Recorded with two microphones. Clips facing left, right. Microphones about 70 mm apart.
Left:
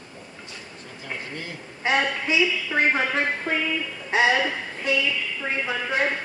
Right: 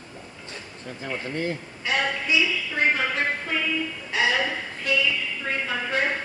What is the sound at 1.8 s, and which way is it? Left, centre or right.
A woman's voice, left.